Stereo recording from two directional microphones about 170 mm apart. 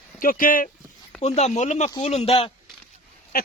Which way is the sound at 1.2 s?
40° left (ahead or behind).